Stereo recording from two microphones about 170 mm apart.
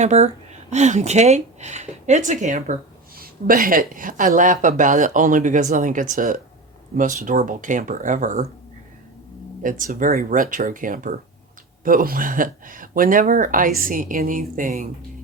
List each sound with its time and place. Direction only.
0.0 s speech: 40° right (ahead or behind)
3.2 s speech: 60° right (ahead or behind)
9.6 s speech: 50° right (ahead or behind)